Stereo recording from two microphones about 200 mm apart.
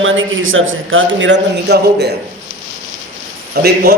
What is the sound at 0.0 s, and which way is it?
A man's voice, 80° right.